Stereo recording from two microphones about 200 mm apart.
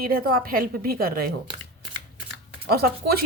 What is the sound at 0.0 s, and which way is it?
Speech, 50° right (ahead or behind).